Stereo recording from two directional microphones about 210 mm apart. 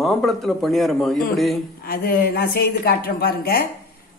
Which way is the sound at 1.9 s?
45° left (ahead or behind).